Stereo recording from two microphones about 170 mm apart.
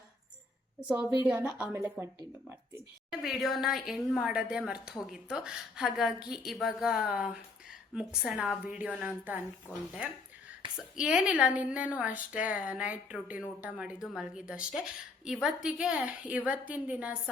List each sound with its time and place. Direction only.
0.8 s a woman's voice: 5° right (ahead or behind)
3.1 s a woman's voice: centre (ahead or behind)
10.8 s a woman's voice: 5° right (ahead or behind)